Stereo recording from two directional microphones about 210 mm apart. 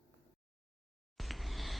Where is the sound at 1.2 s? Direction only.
Centre (ahead or behind).